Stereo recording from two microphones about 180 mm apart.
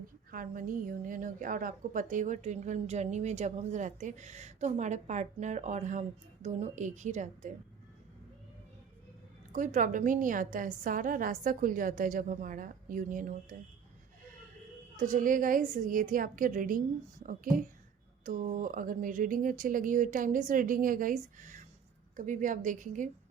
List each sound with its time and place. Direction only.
0.3 s a woman's voice: 50° right (ahead or behind)
9.5 s a woman's voice: 45° right (ahead or behind)
14.9 s a woman's voice: 45° right (ahead or behind)